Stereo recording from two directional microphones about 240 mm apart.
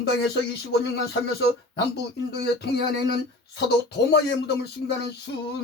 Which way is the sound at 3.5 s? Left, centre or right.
Left.